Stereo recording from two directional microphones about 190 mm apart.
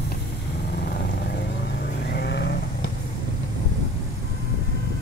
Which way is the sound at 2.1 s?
60° left (ahead or behind).